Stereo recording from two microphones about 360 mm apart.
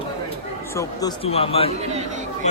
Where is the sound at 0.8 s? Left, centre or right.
Centre.